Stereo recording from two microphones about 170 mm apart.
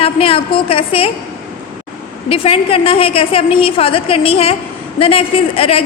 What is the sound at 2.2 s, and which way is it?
A woman's voice, 35° left (ahead or behind).